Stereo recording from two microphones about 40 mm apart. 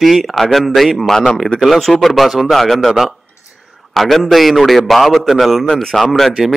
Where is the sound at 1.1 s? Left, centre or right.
Centre.